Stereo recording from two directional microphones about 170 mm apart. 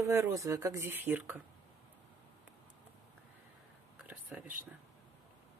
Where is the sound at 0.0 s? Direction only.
15° right (ahead or behind).